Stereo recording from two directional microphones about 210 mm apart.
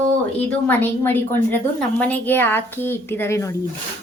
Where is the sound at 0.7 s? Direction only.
10° left (ahead or behind).